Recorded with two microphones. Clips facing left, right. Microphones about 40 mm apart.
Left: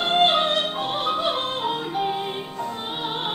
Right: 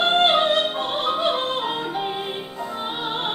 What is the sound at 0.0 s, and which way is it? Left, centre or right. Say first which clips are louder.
Music: right 2 dB; centre.